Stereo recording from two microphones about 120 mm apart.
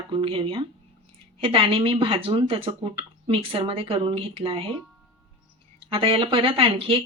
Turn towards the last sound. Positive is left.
turn(degrees=-50)  # may be behind; listen again after turning